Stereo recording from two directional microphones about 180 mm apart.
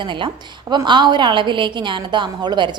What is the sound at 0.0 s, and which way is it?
A woman's voice, 25° right (ahead or behind).